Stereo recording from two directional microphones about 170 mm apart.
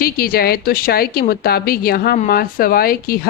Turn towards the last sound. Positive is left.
turn(degrees=60)  # may be behind; listen again after turning